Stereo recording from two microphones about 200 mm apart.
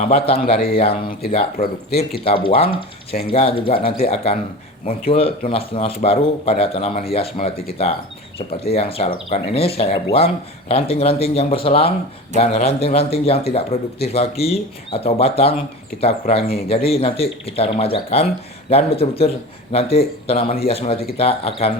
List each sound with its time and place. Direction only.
0.0 s a man's voice: 30° left (ahead or behind)
1.5 s speech: 50° left (ahead or behind)
2.2 s speech: 30° left (ahead or behind)
3.8 s speech: 45° left (ahead or behind)
4.1 s a man's voice: 30° left (ahead or behind)